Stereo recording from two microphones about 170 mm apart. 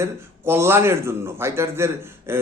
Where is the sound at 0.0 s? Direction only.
15° right (ahead or behind).